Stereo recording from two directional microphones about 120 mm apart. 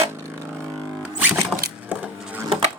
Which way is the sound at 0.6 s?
5° right (ahead or behind).